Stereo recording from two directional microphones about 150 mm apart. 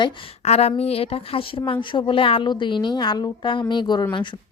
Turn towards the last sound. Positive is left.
turn(degrees=30)  # may be behind; listen again after turning